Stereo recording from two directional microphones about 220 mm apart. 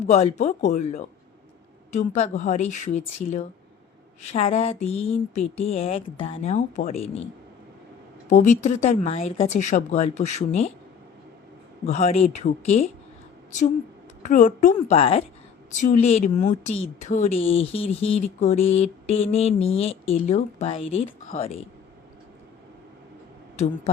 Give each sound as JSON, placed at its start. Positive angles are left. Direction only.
{"t": 0.0, "sound": "speech", "side_deg": 30}
{"t": 8.3, "sound": "speech", "side_deg": 35}
{"t": 11.9, "sound": "speech", "side_deg": 30}
{"t": 14.2, "sound": "speech", "side_deg": 35}